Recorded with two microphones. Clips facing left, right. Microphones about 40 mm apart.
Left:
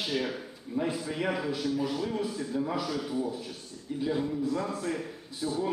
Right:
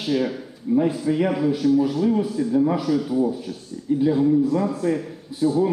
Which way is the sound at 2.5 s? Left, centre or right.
Right.